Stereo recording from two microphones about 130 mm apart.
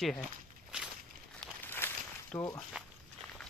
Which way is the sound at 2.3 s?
25° left (ahead or behind).